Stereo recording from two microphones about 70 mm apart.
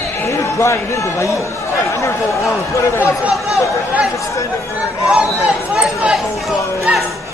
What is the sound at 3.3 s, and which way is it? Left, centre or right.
Speech, centre.